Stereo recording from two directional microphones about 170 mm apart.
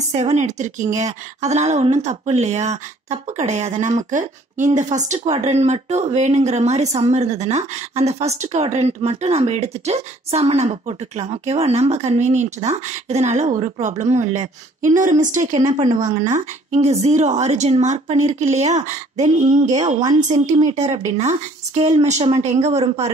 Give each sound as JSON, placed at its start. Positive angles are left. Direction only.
{"t": 0.1, "sound": "a woman's voice", "side_deg": -40}
{"t": 15.7, "sound": "speech", "side_deg": -30}
{"t": 16.0, "sound": "a woman's voice", "side_deg": -45}